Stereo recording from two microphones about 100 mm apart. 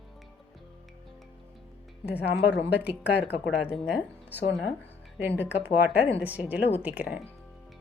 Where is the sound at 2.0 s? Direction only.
15° right (ahead or behind).